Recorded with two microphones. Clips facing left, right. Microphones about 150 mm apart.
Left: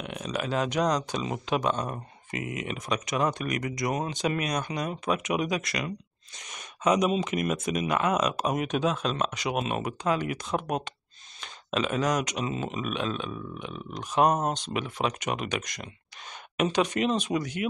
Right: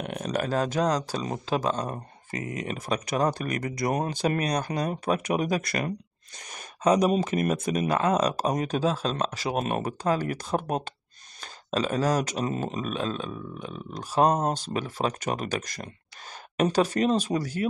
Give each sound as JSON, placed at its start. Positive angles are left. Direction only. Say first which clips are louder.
{"t": 0.0, "sound": "speech", "louder": "right 3 dB", "side_deg": -45}